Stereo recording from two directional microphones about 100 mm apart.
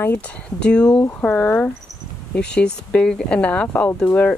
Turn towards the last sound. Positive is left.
turn(degrees=15)  # may be behind; listen again after turning